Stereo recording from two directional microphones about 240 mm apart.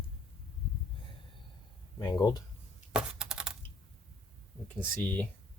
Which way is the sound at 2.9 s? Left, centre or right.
Centre.